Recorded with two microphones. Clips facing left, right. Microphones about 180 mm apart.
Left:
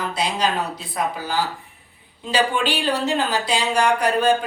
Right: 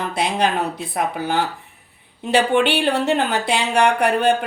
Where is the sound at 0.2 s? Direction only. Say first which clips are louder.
Right 3 dB; 55° right (ahead or behind).